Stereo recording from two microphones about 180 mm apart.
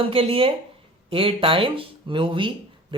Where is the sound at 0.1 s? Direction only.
30° right (ahead or behind).